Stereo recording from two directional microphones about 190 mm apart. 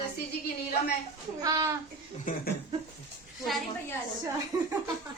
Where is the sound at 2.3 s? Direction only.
45° left (ahead or behind).